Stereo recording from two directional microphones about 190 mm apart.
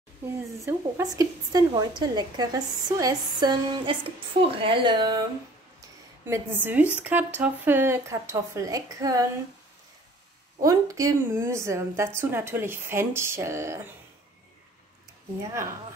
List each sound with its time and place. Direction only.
0.7 s speech: 15° right (ahead or behind)
10.6 s speech: 20° right (ahead or behind)
15.4 s speech: 15° right (ahead or behind)